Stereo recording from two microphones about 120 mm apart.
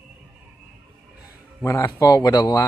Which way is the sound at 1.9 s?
30° left (ahead or behind).